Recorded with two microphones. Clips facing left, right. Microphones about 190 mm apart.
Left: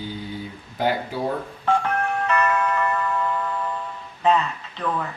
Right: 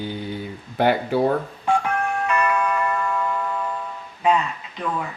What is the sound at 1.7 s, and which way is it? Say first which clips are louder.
Telephone dialing: even; 10° right (ahead or behind).